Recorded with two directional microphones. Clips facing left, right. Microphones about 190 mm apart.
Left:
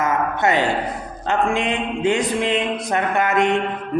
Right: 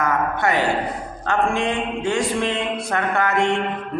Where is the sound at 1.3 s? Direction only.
20° left (ahead or behind).